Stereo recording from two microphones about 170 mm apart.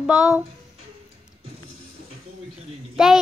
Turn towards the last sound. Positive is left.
turn(degrees=0)  # may be behind; listen again after turning